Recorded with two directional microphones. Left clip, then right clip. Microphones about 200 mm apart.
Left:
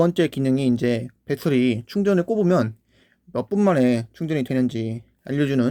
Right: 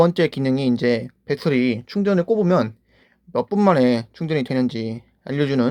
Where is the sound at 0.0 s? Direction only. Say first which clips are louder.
Right 3 dB; 25° left (ahead or behind).